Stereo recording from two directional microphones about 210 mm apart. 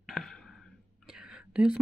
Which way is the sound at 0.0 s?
Centre (ahead or behind).